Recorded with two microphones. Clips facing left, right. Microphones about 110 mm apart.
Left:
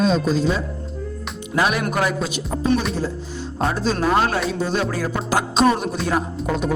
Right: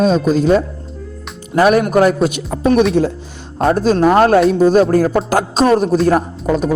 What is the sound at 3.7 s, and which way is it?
Speech, 50° right (ahead or behind).